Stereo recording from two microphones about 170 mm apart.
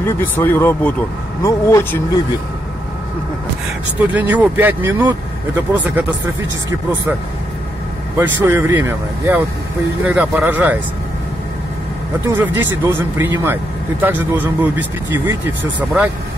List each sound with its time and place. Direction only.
0.0 s speech: 10° left (ahead or behind)
4.1 s speech: 10° right (ahead or behind)
8.2 s speech: 10° right (ahead or behind)
12.3 s speech: 10° right (ahead or behind)